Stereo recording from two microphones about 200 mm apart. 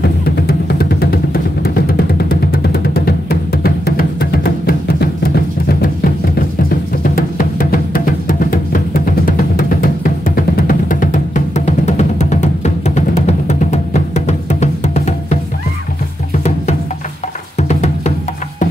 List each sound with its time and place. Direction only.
0.0 s music: 50° left (ahead or behind); by 15.3 s 35° left (ahead or behind)
17.6 s music: 35° left (ahead or behind)